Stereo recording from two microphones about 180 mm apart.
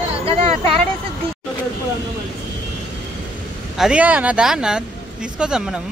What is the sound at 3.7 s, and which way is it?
Speech, 5° right (ahead or behind).